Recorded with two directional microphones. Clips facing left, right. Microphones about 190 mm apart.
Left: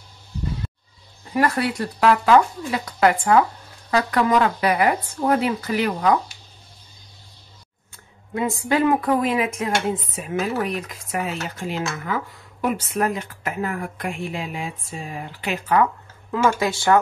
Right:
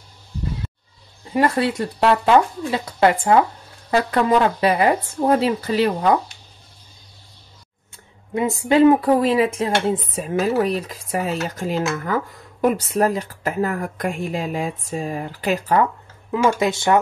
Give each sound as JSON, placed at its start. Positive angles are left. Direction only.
{"t": 1.3, "sound": "speech", "side_deg": -25}
{"t": 8.4, "sound": "speech", "side_deg": -20}
{"t": 16.3, "sound": "speech", "side_deg": -20}